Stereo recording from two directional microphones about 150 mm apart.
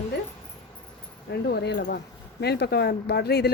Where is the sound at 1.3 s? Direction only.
90° left.